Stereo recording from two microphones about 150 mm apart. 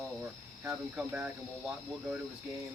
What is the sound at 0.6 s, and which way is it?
Speech, 10° right (ahead or behind).